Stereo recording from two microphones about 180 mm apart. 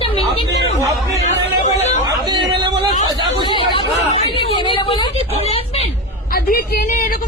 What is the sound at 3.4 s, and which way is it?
Chatter, 25° left (ahead or behind).